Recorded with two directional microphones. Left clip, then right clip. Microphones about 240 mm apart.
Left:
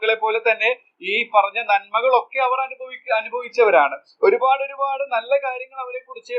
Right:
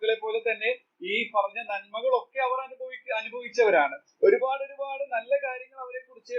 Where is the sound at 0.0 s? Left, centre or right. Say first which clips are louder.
Left 8 dB; centre.